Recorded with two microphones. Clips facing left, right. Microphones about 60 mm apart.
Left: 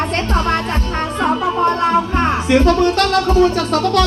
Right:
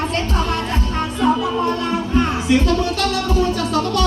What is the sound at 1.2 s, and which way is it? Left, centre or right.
Music, left.